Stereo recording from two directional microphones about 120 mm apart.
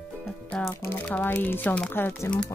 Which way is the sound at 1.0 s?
10° left (ahead or behind).